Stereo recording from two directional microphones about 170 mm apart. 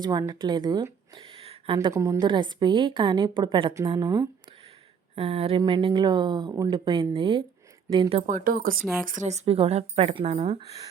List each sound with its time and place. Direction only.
0.0 s speech: 25° right (ahead or behind)
1.9 s a woman's voice: 15° right (ahead or behind)
8.3 s speech: 50° right (ahead or behind)
9.0 s a woman's voice: 45° right (ahead or behind)